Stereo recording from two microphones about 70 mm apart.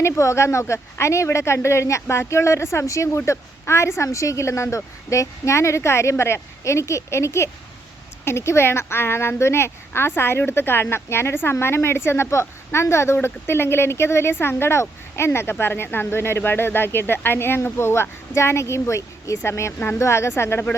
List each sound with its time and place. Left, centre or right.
0.0 s a woman's voice: left